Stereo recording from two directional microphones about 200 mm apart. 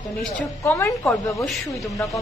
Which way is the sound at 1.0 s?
Centre (ahead or behind).